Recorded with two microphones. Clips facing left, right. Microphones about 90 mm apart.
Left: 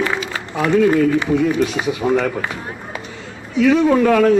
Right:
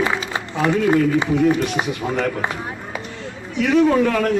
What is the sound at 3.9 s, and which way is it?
Speech, centre (ahead or behind).